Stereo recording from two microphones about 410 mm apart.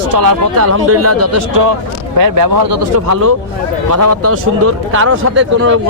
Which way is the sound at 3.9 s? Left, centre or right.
Right.